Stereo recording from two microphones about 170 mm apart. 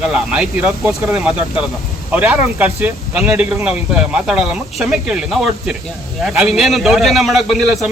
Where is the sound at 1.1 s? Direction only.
Centre (ahead or behind).